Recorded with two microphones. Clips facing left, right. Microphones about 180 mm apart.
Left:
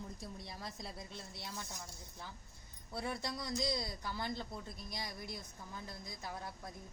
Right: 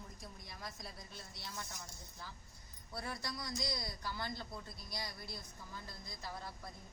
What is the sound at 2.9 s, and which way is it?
A man's voice, 20° left (ahead or behind).